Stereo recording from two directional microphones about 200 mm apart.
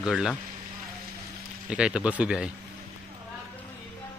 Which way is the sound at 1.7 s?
5° right (ahead or behind).